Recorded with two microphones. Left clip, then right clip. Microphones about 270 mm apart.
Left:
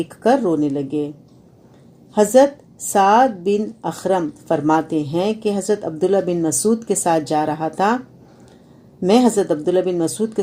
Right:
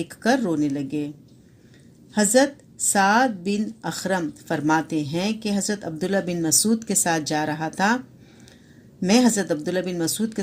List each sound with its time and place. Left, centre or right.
0.2 s a woman's voice: right
2.1 s a woman's voice: right
9.0 s a woman's voice: right